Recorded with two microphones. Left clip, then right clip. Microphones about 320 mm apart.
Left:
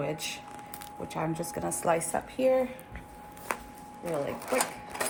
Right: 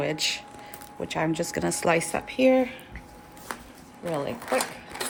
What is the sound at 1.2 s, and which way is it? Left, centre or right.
Speech, right.